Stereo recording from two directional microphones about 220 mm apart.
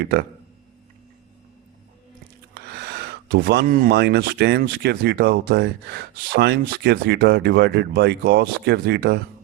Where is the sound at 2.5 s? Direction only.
50° right (ahead or behind).